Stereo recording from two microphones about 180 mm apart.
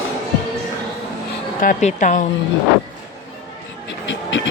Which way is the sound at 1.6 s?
45° left (ahead or behind).